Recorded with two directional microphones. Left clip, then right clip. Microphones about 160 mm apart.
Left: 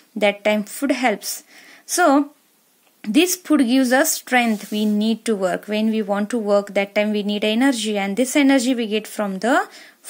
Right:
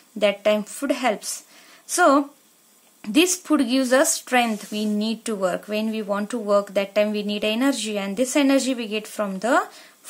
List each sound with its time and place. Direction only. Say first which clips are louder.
0.2 s a woman's voice: left 1 dB; 30° left (ahead or behind)